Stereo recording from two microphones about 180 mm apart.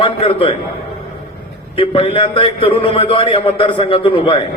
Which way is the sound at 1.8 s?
30° left (ahead or behind).